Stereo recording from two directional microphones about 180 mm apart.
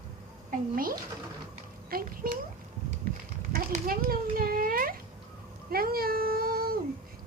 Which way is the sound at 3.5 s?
55° right (ahead or behind).